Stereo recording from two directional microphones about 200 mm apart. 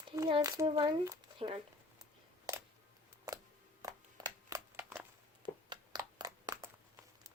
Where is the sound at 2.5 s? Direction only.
15° right (ahead or behind).